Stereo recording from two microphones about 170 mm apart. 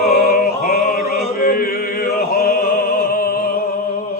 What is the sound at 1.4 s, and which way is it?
Music, 60° left (ahead or behind).